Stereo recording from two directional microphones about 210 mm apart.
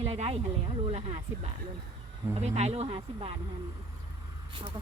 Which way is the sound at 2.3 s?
30° right (ahead or behind).